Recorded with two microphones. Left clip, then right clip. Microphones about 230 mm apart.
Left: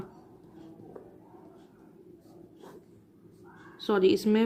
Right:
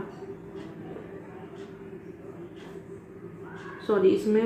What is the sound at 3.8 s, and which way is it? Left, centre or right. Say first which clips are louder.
Speech: right 2 dB; left.